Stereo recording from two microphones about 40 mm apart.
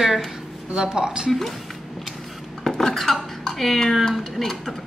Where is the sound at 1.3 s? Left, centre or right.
Centre.